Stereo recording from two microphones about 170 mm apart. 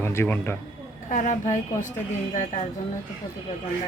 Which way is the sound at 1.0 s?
50° left (ahead or behind).